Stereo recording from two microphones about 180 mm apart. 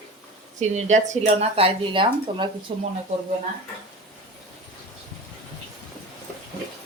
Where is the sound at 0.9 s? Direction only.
40° right (ahead or behind).